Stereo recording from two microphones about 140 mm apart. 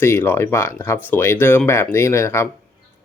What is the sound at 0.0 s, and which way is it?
Speech, 15° left (ahead or behind).